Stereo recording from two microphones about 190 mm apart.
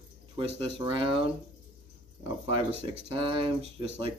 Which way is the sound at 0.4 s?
25° right (ahead or behind).